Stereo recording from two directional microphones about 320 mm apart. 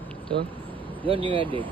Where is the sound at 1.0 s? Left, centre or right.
Centre.